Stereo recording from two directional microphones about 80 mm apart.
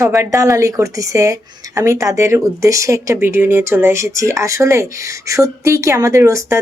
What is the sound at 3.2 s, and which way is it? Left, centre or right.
Speech, right.